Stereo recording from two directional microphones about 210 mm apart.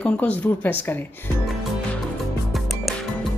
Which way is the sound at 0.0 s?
5° left (ahead or behind).